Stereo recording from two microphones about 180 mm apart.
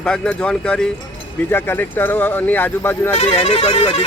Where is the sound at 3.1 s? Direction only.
35° left (ahead or behind).